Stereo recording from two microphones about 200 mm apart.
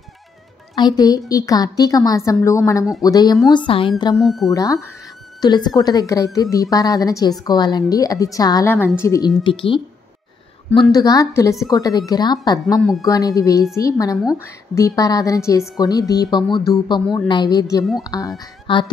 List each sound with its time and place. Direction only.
0.7 s a woman's voice: 20° left (ahead or behind)
4.2 s speech: centre (ahead or behind)
5.4 s a woman's voice: 20° left (ahead or behind)
9.4 s speech: 25° left (ahead or behind)
10.9 s a woman's voice: 20° left (ahead or behind)